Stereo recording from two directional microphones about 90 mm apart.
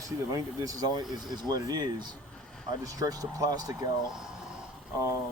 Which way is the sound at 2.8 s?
40° right (ahead or behind).